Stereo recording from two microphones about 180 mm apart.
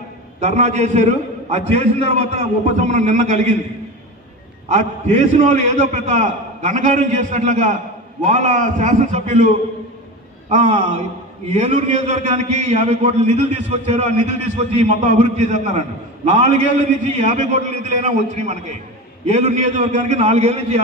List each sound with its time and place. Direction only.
0.4 s a man's voice: 40° right (ahead or behind)
4.6 s a man's voice: 40° right (ahead or behind)
10.5 s a man's voice: 40° right (ahead or behind)